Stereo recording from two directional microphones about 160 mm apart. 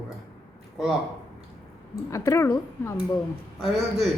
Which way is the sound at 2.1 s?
20° left (ahead or behind).